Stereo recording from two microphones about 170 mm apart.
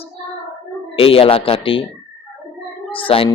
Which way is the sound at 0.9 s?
35° left (ahead or behind).